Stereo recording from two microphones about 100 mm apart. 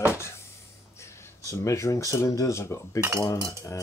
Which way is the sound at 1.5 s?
30° left (ahead or behind).